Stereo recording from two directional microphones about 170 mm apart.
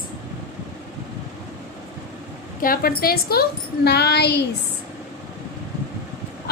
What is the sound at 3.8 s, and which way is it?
Speech, 75° left (ahead or behind).